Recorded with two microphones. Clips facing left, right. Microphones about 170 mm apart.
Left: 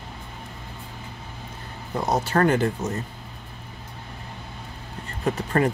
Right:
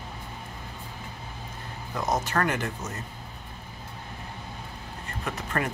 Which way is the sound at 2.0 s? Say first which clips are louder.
Left 5 dB; 30° left (ahead or behind).